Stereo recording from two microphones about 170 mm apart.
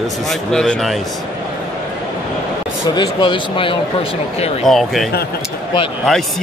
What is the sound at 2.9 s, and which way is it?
Speech, 30° left (ahead or behind).